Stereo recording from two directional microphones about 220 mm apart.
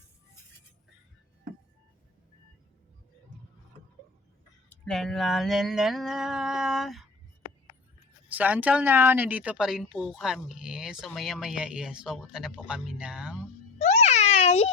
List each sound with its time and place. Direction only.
4.7 s a sound: 5° left (ahead or behind)
8.3 s speech: 5° right (ahead or behind)
13.7 s music: 30° left (ahead or behind)